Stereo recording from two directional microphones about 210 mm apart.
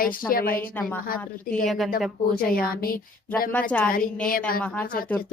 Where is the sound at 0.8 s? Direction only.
5° left (ahead or behind).